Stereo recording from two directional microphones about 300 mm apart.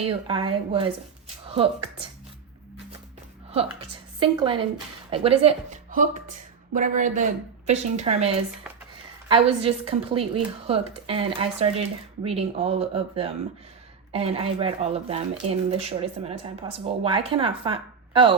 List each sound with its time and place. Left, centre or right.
0.1 s a woman's voice: centre
3.5 s speech: centre